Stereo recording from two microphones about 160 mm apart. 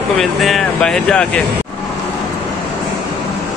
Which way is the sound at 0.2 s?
Centre (ahead or behind).